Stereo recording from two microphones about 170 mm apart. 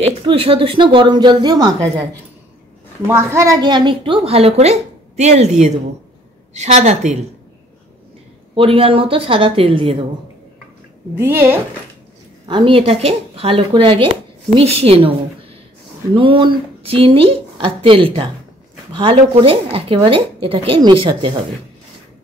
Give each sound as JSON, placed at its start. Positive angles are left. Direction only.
{"t": 0.0, "sound": "a woman's voice", "side_deg": -35}
{"t": 3.1, "sound": "a woman's voice", "side_deg": -15}
{"t": 8.5, "sound": "speech", "side_deg": -35}
{"t": 11.1, "sound": "a woman's voice", "side_deg": -15}
{"t": 12.4, "sound": "speech", "side_deg": -30}
{"t": 16.2, "sound": "speech", "side_deg": -30}